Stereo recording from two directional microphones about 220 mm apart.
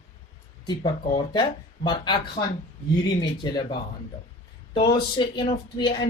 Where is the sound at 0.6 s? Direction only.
20° left (ahead or behind).